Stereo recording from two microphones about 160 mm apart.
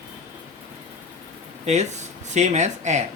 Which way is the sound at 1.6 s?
45° right (ahead or behind).